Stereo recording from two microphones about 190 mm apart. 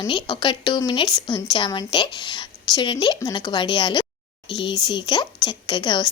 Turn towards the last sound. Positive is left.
turn(degrees=25)  # may be behind; listen again after turning